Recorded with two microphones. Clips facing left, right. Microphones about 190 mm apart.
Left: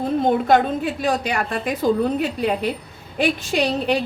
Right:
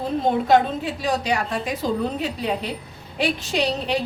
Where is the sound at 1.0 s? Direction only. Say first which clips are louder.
Right 1 dB; 55° left (ahead or behind).